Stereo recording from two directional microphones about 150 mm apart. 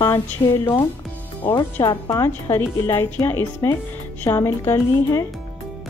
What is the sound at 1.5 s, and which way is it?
A woman's voice, 25° left (ahead or behind).